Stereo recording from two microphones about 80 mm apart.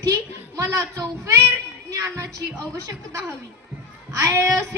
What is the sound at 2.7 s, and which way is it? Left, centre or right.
Speech, right.